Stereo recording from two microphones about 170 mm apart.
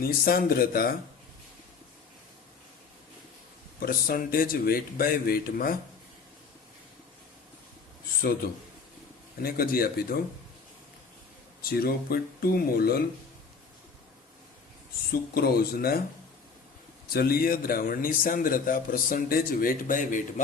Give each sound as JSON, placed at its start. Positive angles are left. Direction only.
{"t": 0.0, "sound": "speech", "side_deg": 60}
{"t": 3.8, "sound": "speech", "side_deg": 60}
{"t": 9.4, "sound": "speech", "side_deg": 60}
{"t": 11.6, "sound": "speech", "side_deg": 60}
{"t": 15.1, "sound": "speech", "side_deg": 65}
{"t": 17.1, "sound": "speech", "side_deg": 60}